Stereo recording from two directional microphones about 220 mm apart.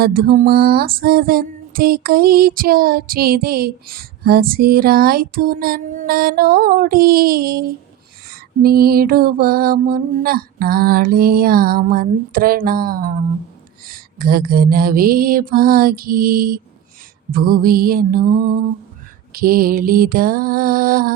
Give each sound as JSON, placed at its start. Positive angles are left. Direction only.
{"t": 0.0, "sound": "music", "side_deg": -40}